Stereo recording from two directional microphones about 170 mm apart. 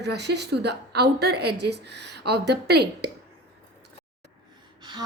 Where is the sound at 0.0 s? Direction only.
80° right.